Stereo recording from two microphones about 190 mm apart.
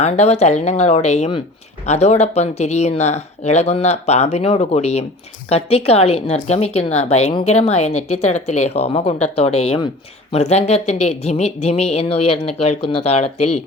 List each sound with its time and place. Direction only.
0.0 s a woman's voice: 35° left (ahead or behind)